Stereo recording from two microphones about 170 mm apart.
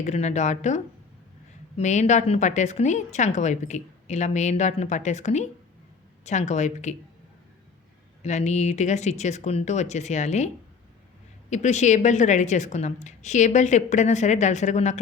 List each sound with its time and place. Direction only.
0.0 s a woman's voice: 40° left (ahead or behind)
8.2 s a woman's voice: 40° left (ahead or behind)
11.5 s a woman's voice: 45° left (ahead or behind)